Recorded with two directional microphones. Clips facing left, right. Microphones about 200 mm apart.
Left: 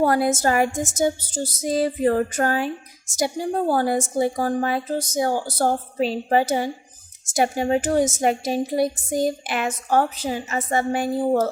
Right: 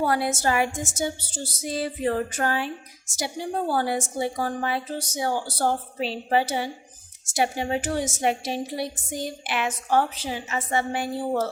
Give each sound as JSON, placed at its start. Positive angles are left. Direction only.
{"t": 0.0, "sound": "a woman's voice", "side_deg": 45}